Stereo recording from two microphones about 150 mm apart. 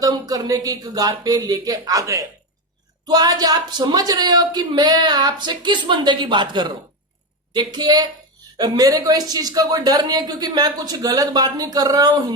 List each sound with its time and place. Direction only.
0.0 s speech: 25° right (ahead or behind)